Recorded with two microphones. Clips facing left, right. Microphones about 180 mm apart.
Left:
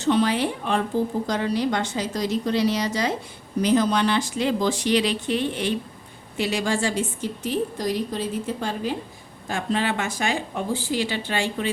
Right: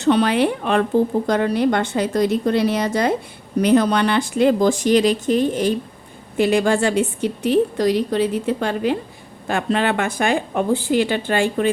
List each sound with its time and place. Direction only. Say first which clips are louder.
0.0 s speech: right 5 dB; 65° right (ahead or behind); by 5.7 s 40° right (ahead or behind)
6.3 s a woman's voice: right 8 dB; 55° right (ahead or behind)